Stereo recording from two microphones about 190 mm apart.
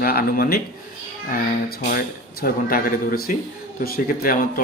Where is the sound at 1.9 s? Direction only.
50° left (ahead or behind).